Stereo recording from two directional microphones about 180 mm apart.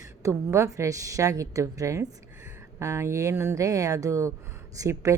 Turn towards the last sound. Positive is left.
turn(degrees=-15)  # may be behind; listen again after turning